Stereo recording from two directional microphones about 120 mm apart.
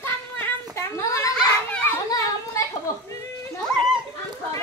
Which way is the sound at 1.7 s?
15° left (ahead or behind).